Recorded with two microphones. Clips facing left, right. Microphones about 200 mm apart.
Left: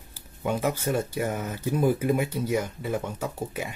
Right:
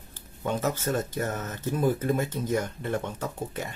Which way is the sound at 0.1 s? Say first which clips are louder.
Left 2 dB; 10° left (ahead or behind).